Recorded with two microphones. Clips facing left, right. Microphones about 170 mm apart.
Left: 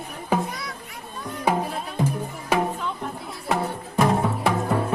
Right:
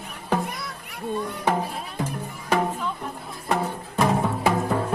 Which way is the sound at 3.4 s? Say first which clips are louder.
Even; centre (ahead or behind).